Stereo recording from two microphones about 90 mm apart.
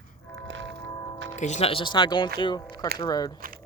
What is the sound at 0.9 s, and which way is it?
Music, 35° left (ahead or behind).